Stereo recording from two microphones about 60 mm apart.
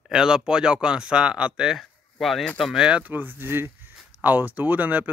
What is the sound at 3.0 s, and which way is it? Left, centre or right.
Speech, right.